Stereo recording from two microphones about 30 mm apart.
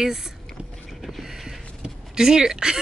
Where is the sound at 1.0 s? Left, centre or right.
Centre.